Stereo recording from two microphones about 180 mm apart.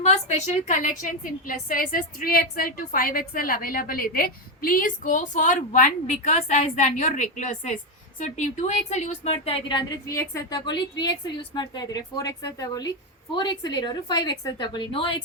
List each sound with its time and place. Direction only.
0.0 s a woman's voice: 40° left (ahead or behind)